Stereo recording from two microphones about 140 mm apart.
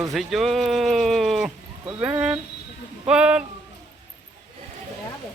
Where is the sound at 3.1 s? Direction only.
5° right (ahead or behind).